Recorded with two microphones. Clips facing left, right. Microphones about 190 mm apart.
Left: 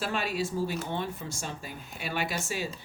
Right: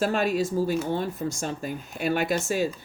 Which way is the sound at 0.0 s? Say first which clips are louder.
Right 7 dB; 45° right (ahead or behind).